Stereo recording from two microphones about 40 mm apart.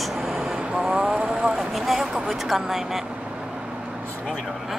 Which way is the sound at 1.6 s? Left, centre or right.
Centre.